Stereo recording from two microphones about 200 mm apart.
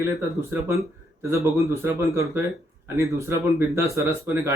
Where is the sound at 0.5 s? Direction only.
15° right (ahead or behind).